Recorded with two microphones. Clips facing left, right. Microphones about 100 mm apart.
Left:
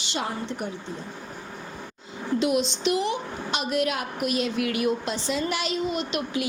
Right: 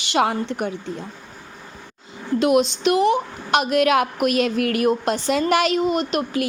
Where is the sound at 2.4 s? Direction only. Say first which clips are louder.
Right 7 dB; 55° right (ahead or behind).